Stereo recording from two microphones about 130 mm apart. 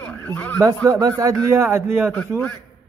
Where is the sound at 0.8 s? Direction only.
25° right (ahead or behind).